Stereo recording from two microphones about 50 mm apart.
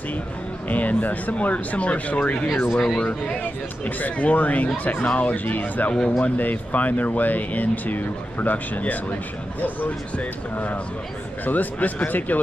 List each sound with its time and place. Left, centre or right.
0.7 s speech: left
2.5 s speech: left
2.8 s speech: centre
3.8 s speech: left